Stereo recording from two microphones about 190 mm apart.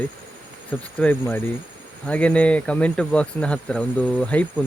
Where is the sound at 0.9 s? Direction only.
5° left (ahead or behind).